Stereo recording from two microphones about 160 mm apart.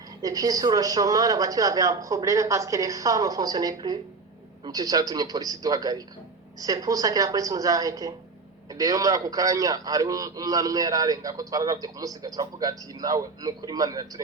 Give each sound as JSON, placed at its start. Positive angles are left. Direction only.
{"t": 0.2, "sound": "a man's voice", "side_deg": -25}